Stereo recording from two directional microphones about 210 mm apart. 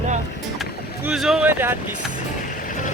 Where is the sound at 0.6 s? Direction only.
Centre (ahead or behind).